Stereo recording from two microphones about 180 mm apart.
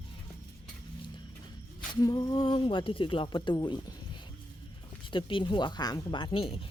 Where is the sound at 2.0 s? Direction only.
20° left (ahead or behind).